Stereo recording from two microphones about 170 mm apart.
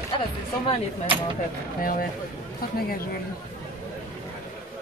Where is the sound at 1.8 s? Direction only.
55° left (ahead or behind).